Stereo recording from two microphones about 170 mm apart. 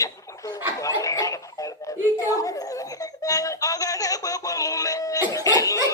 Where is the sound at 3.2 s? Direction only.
20° left (ahead or behind).